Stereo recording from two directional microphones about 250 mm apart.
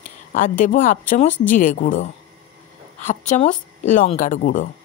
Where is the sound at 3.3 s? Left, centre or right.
Left.